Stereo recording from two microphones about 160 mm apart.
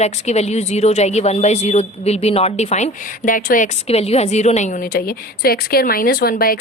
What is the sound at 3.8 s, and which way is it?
A woman's voice, 40° left (ahead or behind).